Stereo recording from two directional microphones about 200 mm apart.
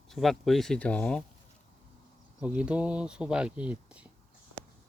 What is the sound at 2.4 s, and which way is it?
Speech, 5° right (ahead or behind).